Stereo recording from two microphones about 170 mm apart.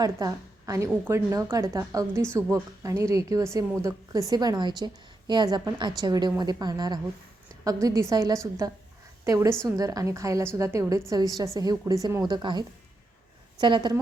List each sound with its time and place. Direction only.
0.0 s a woman's voice: 20° right (ahead or behind)